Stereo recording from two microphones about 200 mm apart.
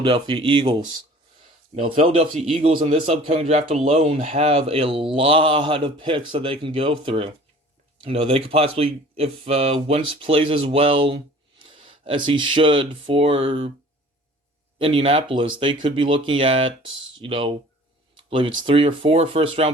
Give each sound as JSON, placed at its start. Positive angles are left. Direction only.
{"t": 0.0, "sound": "speech", "side_deg": -25}
{"t": 1.7, "sound": "speech", "side_deg": -35}
{"t": 14.8, "sound": "speech", "side_deg": -30}